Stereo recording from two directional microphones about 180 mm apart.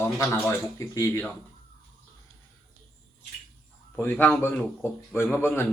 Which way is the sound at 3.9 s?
10° left (ahead or behind).